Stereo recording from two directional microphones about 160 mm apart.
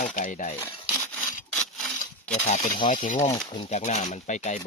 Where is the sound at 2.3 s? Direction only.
45° left (ahead or behind).